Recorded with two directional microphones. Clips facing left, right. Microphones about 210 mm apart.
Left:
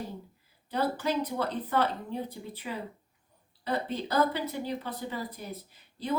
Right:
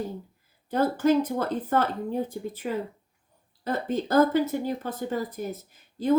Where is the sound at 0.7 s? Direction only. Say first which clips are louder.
Right 7 dB; 45° right (ahead or behind).